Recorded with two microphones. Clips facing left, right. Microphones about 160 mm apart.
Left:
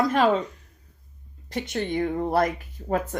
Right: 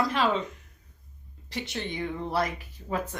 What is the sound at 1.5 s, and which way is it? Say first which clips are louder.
Speech: left 7 dB; 50° left (ahead or behind).